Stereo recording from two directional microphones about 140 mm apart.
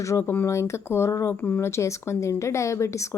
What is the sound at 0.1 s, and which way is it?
Speech, 15° left (ahead or behind).